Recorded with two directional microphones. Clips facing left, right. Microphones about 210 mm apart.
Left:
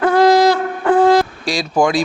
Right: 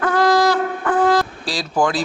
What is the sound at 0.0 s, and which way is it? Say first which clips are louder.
Wind instrument: left 5 dB; 25° left (ahead or behind).